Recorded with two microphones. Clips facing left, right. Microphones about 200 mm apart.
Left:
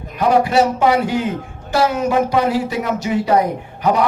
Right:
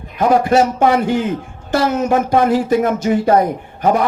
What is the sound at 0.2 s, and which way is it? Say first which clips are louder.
Speech: right 1 dB; 50° right (ahead or behind).